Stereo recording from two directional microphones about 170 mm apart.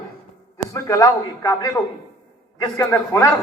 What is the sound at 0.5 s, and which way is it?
A man's voice, 15° left (ahead or behind).